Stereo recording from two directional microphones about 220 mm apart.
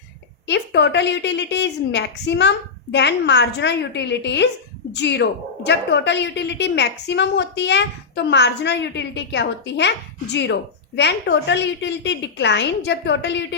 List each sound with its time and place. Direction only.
0.4 s a woman's voice: 50° left (ahead or behind)